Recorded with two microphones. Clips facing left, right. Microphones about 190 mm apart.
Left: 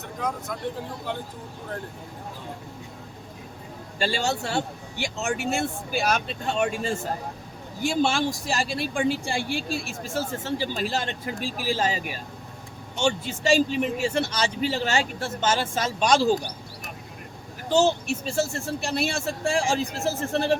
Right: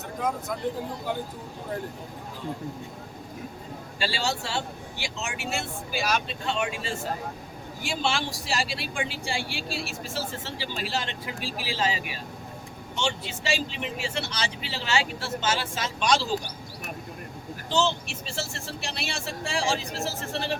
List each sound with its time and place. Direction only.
3.9 s speech: 50° left (ahead or behind)
17.7 s speech: 45° left (ahead or behind)